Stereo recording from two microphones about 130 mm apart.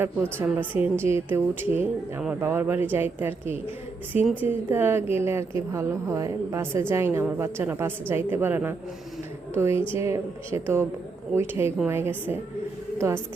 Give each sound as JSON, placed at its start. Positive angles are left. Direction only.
{"t": 0.0, "sound": "a woman's voice", "side_deg": -15}
{"t": 9.9, "sound": "a woman's voice", "side_deg": -20}